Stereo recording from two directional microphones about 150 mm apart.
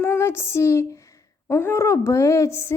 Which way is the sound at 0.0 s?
15° left (ahead or behind).